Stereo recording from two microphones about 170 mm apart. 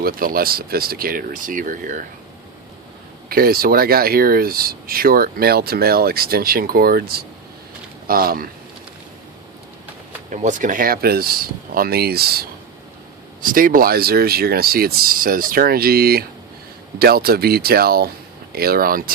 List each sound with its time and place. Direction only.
0.0 s speech: 60° right (ahead or behind)
3.2 s speech: 60° right (ahead or behind)
10.3 s speech: 45° right (ahead or behind); by 12.5 s 65° right (ahead or behind)
13.4 s speech: 55° right (ahead or behind)